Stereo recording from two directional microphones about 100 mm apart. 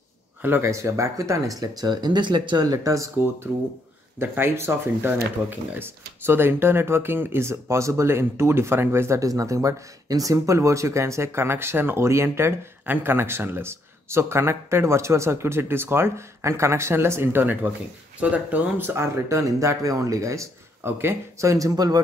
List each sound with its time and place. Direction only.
0.4 s speech: 25° right (ahead or behind); by 22.0 s 40° right (ahead or behind)